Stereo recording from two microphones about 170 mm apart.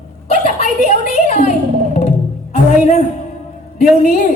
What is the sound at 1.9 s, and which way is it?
Music, 40° left (ahead or behind).